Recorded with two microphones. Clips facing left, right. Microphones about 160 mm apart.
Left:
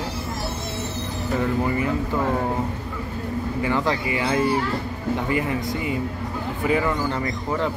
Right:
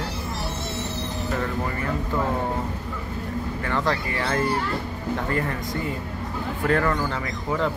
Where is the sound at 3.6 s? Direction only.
15° left (ahead or behind).